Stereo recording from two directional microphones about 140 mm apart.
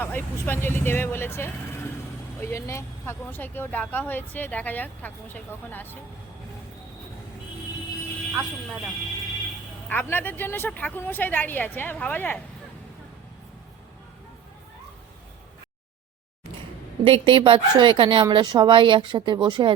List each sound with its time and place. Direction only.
0.0 s speech: 15° left (ahead or behind)
9.9 s speech: 15° left (ahead or behind)
17.0 s speech: 40° right (ahead or behind)